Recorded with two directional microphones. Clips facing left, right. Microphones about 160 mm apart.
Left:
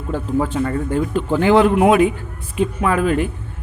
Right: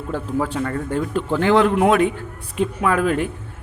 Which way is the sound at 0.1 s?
Centre (ahead or behind).